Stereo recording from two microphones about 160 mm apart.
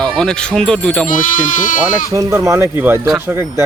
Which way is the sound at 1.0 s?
55° left (ahead or behind).